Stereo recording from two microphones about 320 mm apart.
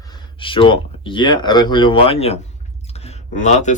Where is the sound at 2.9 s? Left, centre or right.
Centre.